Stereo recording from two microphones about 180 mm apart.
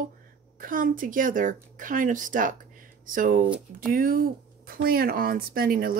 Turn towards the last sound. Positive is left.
turn(degrees=-55)  # may be behind; listen again after turning